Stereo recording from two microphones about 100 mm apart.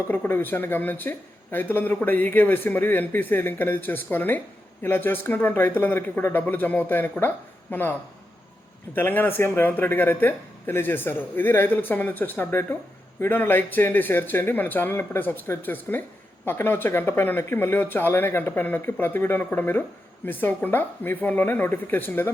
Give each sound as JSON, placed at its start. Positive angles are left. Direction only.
{"t": 0.1, "sound": "speech", "side_deg": 20}